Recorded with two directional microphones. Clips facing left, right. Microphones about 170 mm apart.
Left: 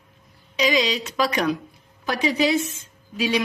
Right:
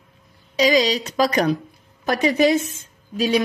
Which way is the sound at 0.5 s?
40° right (ahead or behind).